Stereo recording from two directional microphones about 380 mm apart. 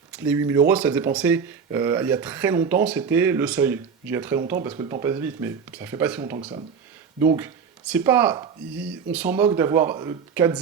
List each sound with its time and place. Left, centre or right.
0.2 s speech: centre